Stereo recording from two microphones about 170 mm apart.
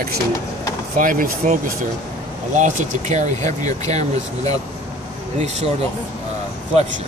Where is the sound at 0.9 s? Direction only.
55° right (ahead or behind).